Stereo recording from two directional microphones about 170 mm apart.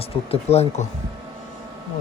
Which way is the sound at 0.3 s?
40° left (ahead or behind).